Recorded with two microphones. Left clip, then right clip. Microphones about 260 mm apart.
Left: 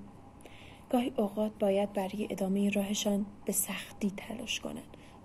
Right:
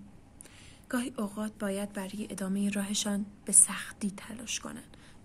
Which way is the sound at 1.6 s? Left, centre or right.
Right.